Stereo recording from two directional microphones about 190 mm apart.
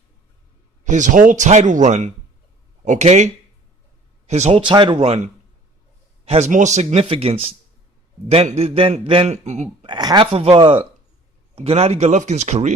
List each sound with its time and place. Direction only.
0.9 s a man's voice: 40° right (ahead or behind)
9.8 s a man's voice: 20° right (ahead or behind); by 12.7 s 40° right (ahead or behind)